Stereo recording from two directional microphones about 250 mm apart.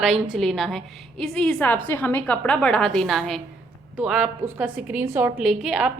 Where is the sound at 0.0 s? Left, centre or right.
Centre.